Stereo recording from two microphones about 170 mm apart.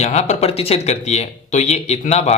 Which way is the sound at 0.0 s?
40° left (ahead or behind).